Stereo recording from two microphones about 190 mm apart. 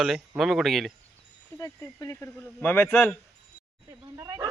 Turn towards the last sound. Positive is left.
turn(degrees=-15)  # may be behind; listen again after turning